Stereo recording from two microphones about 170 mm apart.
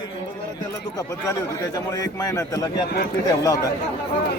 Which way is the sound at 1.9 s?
20° left (ahead or behind).